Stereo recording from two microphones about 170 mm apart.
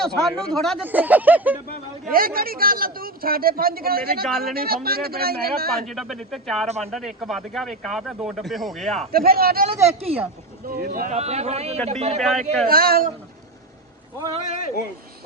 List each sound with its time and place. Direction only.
0.0 s speech: 5° left (ahead or behind)
0.8 s speech: 10° right (ahead or behind)
2.1 s a man's voice: 60° right (ahead or behind)
5.9 s speech: centre (ahead or behind)
6.7 s speech: 40° right (ahead or behind)
6.9 s speech: centre (ahead or behind)
9.1 s a man's voice: 65° right (ahead or behind)
9.6 s speech: 35° right (ahead or behind)
10.7 s a man's voice: 60° right (ahead or behind)
11.1 s speech: 40° right (ahead or behind)
12.2 s speech: centre (ahead or behind)
12.6 s a man's voice: 60° right (ahead or behind)